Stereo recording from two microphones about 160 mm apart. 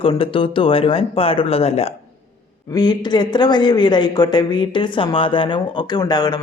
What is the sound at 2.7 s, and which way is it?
A woman's voice, 25° left (ahead or behind).